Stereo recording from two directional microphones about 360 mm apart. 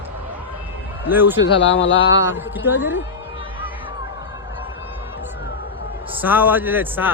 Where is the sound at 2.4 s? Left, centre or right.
Centre.